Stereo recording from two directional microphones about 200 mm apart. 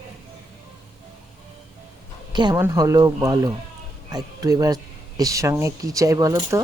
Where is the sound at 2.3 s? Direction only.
20° right (ahead or behind).